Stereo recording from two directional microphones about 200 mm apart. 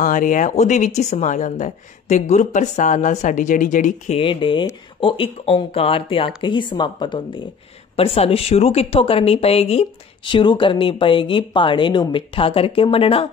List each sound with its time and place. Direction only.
0.0 s a woman's voice: 40° left (ahead or behind)